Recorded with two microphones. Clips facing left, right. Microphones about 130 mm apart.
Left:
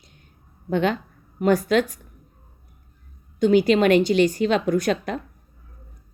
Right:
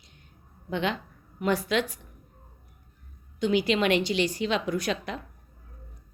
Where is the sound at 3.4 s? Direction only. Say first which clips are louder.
Left 7 dB; 45° left (ahead or behind).